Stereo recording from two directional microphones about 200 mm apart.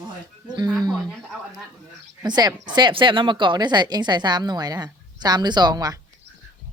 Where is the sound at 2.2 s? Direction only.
20° right (ahead or behind).